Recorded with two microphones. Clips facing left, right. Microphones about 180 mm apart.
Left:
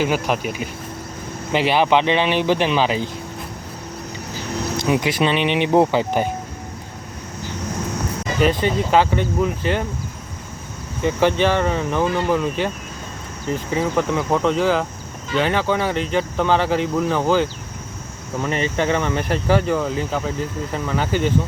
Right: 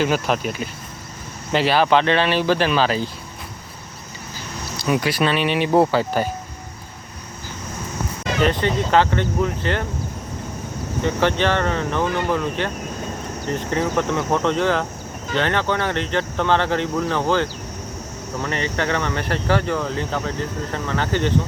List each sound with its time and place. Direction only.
0.0 s speech: 10° left (ahead or behind)
4.8 s speech: 20° left (ahead or behind)
8.4 s speech: 10° left (ahead or behind)
11.0 s speech: 10° left (ahead or behind)